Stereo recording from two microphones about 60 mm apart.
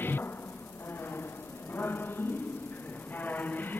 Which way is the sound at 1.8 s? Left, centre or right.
Left.